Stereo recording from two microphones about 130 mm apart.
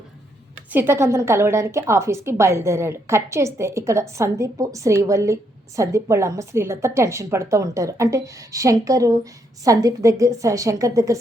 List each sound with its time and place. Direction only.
0.7 s a woman's voice: 15° right (ahead or behind)